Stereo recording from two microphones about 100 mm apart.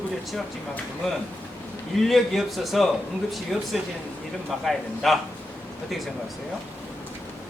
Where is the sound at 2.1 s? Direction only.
Centre (ahead or behind).